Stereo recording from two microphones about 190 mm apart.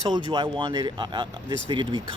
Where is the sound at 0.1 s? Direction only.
25° right (ahead or behind).